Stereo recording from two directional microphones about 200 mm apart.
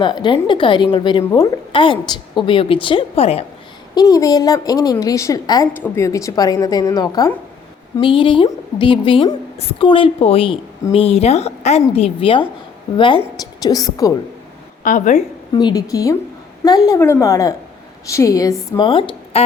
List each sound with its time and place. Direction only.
0.0 s speech: 25° left (ahead or behind)
3.9 s a woman's voice: 15° left (ahead or behind)
13.6 s speech: 20° left (ahead or behind)
14.8 s a woman's voice: 40° left (ahead or behind)
15.5 s a woman's voice: 20° left (ahead or behind)